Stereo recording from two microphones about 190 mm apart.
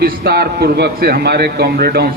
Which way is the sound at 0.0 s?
55° right (ahead or behind).